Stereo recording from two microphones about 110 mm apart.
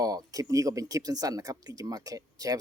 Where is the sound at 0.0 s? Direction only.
35° right (ahead or behind).